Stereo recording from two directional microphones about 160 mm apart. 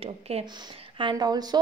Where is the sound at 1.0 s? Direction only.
30° right (ahead or behind).